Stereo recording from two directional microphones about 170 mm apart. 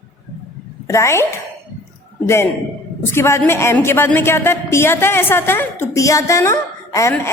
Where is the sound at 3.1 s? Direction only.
15° left (ahead or behind).